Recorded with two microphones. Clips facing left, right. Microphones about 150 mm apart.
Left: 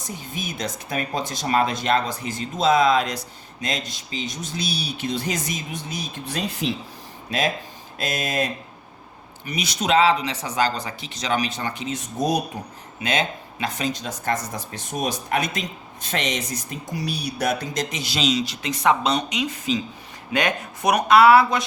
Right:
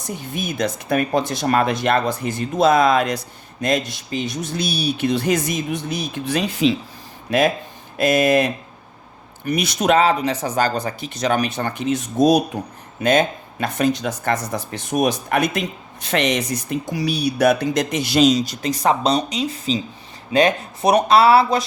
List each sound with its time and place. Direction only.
0.2 s speech: 60° right (ahead or behind); by 6.7 s 90° right
7.3 s speech: 60° right (ahead or behind); by 12.4 s 85° right
13.0 s speech: 50° right (ahead or behind); by 21.6 s 30° right (ahead or behind)